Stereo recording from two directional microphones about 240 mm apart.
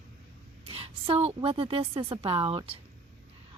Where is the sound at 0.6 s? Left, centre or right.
Right.